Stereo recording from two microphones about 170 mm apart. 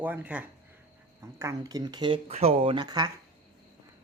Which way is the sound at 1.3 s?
20° right (ahead or behind).